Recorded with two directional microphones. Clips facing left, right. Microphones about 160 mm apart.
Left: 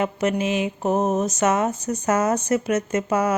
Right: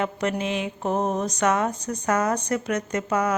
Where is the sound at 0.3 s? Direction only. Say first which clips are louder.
Left 4 dB; 10° left (ahead or behind).